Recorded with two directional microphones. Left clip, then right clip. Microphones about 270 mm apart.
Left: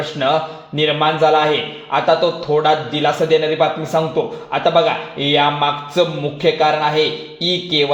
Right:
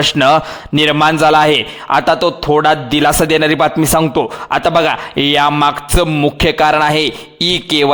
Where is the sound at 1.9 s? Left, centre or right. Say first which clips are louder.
Right 3 dB; right.